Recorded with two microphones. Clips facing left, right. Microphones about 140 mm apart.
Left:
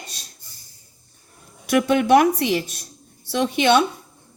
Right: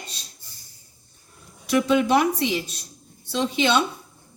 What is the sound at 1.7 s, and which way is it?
Speech, 60° left (ahead or behind).